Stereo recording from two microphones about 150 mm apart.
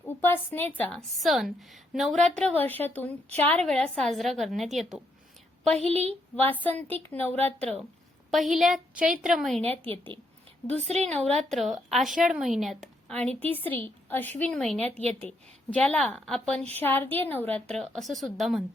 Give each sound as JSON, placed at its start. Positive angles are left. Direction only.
{"t": 0.0, "sound": "a woman's voice", "side_deg": 15}
{"t": 5.8, "sound": "a woman's voice", "side_deg": -45}
{"t": 6.4, "sound": "a woman's voice", "side_deg": 10}
{"t": 8.3, "sound": "a woman's voice", "side_deg": 0}
{"t": 9.6, "sound": "a woman's voice", "side_deg": -40}
{"t": 11.5, "sound": "a woman's voice", "side_deg": 0}